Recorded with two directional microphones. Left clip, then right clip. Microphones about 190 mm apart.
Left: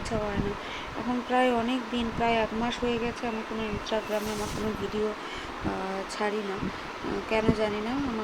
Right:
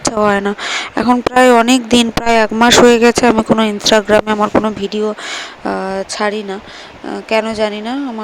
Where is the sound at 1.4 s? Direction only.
60° right (ahead or behind).